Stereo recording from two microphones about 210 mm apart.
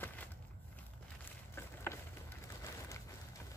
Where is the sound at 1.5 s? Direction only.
10° left (ahead or behind).